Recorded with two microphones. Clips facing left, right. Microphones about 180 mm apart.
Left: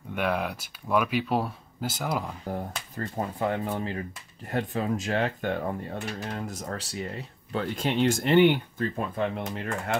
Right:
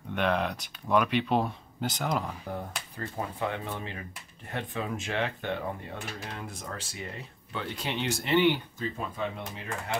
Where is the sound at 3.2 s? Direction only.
50° left (ahead or behind).